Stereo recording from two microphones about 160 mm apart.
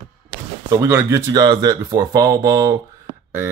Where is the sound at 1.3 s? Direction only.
25° right (ahead or behind).